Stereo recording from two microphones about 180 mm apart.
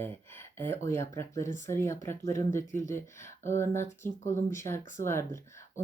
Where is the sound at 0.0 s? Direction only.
15° left (ahead or behind).